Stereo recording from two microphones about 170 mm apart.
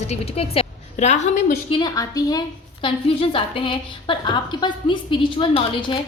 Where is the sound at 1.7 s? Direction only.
25° left (ahead or behind).